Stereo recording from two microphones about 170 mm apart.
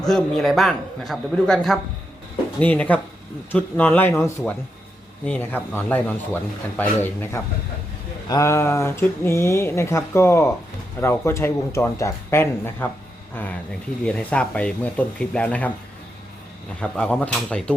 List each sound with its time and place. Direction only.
0.0 s a man's voice: 5° left (ahead or behind)
14.0 s speech: 5° left (ahead or behind)
16.8 s speech: 10° left (ahead or behind)